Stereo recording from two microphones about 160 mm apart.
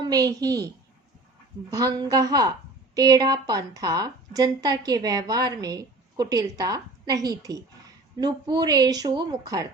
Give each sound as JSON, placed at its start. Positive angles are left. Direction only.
{"t": 0.0, "sound": "a woman's voice", "side_deg": -25}
{"t": 1.7, "sound": "a woman's voice", "side_deg": -25}